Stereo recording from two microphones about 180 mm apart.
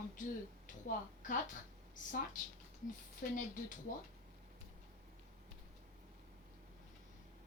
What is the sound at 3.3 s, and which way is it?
Speech, 50° left (ahead or behind).